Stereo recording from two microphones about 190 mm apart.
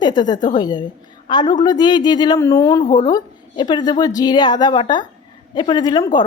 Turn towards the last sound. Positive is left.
turn(degrees=25)  # may be behind; listen again after turning